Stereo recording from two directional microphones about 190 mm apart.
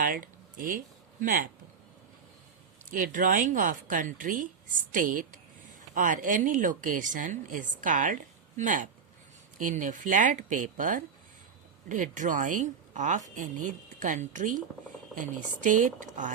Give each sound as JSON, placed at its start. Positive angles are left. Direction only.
{"t": 0.0, "sound": "a sound", "side_deg": -45}
{"t": 1.2, "sound": "a woman's voice", "side_deg": -45}
{"t": 2.9, "sound": "a woman's voice", "side_deg": -45}